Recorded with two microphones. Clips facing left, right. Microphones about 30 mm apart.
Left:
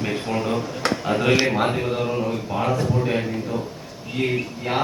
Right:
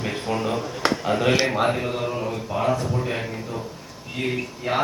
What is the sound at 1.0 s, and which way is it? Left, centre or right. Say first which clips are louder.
Speech: left 2 dB; centre.